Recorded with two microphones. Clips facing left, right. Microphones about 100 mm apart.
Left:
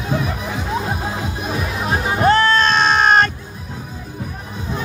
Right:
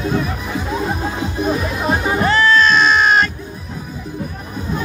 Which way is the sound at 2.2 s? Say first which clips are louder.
Left 1 dB; 45° left (ahead or behind).